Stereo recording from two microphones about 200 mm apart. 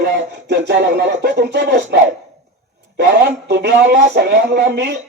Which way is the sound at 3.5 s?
60° right (ahead or behind).